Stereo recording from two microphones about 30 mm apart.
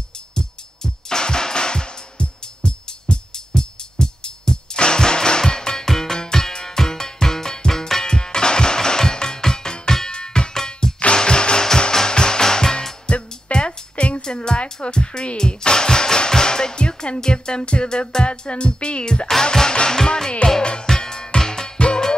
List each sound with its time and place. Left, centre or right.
0.3 s music: left
8.1 s music: left
10.5 s music: centre
11.1 s music: left
13.0 s music: left
14.2 s music: left
18.2 s speech: left
19.7 s music: left
21.7 s music: left